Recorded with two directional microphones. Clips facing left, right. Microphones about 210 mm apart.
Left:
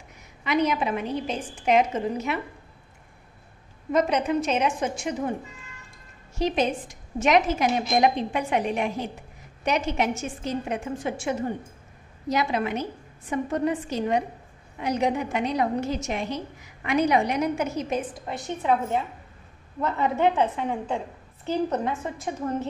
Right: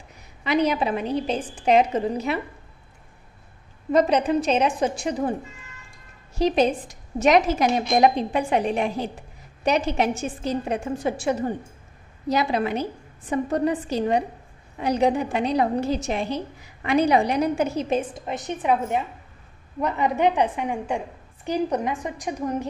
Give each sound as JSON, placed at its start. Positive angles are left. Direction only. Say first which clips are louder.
{"t": 0.4, "sound": "a woman's voice", "louder": "right 2 dB", "side_deg": -35}
{"t": 3.9, "sound": "a woman's voice", "louder": "right 3 dB", "side_deg": -35}
{"t": 6.3, "sound": "a woman's voice", "louder": "right 4 dB", "side_deg": -35}